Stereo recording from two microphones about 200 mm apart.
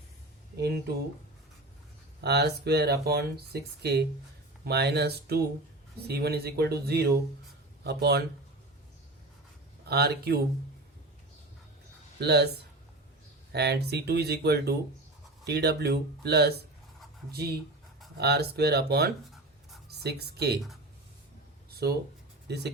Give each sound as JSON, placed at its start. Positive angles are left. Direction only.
{"t": 2.2, "sound": "speech", "side_deg": -55}
{"t": 9.8, "sound": "speech", "side_deg": -55}
{"t": 12.2, "sound": "speech", "side_deg": -55}
{"t": 13.5, "sound": "speech", "side_deg": -55}
{"t": 21.8, "sound": "speech", "side_deg": -55}